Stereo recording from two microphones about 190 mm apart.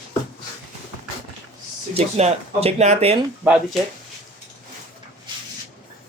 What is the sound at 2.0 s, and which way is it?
Speech, 35° right (ahead or behind).